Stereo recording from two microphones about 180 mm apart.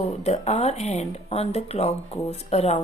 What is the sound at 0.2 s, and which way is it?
Speech, 35° left (ahead or behind).